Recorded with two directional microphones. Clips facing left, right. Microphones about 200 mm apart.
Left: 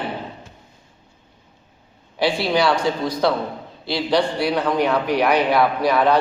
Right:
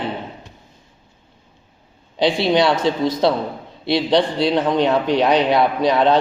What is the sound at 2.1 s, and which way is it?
A man's voice, 20° right (ahead or behind).